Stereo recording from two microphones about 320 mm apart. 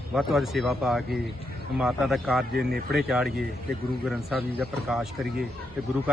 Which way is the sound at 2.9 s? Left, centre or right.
Centre.